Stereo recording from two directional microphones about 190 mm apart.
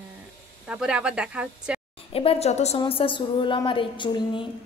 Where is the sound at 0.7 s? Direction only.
5° right (ahead or behind).